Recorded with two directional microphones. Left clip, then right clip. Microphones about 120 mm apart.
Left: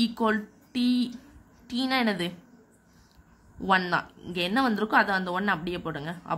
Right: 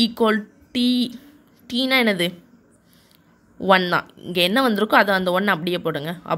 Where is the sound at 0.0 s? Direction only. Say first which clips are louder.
Right 7 dB; 40° right (ahead or behind).